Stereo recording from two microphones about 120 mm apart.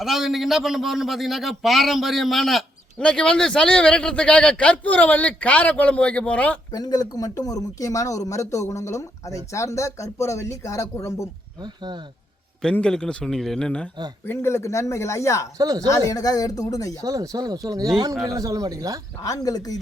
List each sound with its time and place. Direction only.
0.0 s a man's voice: centre (ahead or behind)
6.7 s speech: 30° left (ahead or behind)
11.6 s speech: 35° right (ahead or behind)
12.6 s a man's voice: 5° left (ahead or behind)
14.3 s speech: 20° left (ahead or behind)
15.5 s speech: 30° right (ahead or behind)
15.9 s speech: 30° left (ahead or behind)
17.0 s speech: 30° right (ahead or behind)
19.2 s speech: 30° left (ahead or behind)